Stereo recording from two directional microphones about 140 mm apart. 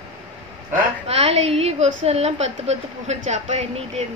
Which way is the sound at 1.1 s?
45° right (ahead or behind).